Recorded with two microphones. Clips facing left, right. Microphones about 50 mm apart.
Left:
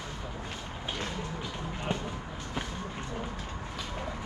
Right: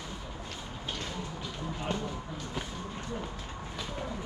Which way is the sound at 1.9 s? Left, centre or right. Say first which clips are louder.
Even; left.